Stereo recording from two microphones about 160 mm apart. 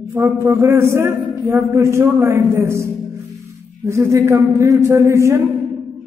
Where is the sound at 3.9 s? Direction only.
20° right (ahead or behind).